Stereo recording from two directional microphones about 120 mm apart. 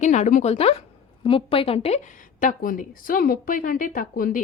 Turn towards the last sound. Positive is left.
turn(degrees=90)